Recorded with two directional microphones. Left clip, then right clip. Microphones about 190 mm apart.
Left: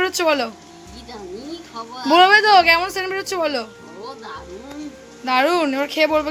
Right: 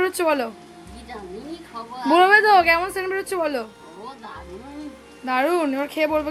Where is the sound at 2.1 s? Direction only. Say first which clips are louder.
Left 3 dB; 5° right (ahead or behind).